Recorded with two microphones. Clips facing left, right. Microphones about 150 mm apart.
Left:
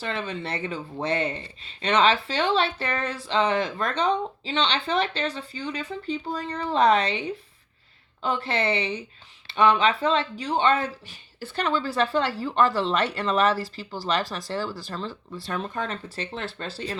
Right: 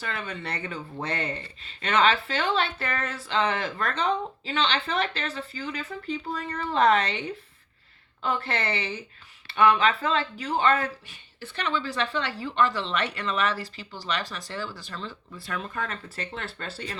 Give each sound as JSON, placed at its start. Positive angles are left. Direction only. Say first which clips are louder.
{"t": 0.0, "sound": "speech", "louder": "left 4 dB", "side_deg": 25}
{"t": 11.5, "sound": "speech", "louder": "left 4 dB", "side_deg": 35}